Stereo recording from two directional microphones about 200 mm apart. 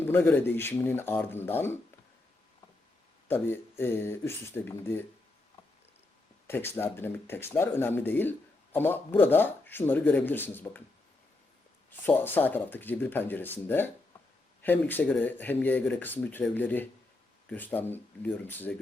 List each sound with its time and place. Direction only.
0.0 s speech: 10° left (ahead or behind)
3.2 s speech: 10° left (ahead or behind)
6.5 s speech: 10° left (ahead or behind)
11.9 s speech: 10° left (ahead or behind)